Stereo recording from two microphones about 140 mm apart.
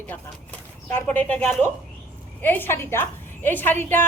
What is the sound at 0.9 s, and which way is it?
A woman's voice, 10° left (ahead or behind).